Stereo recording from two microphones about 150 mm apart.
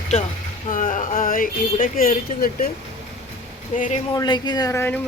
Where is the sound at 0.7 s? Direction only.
65° left (ahead or behind).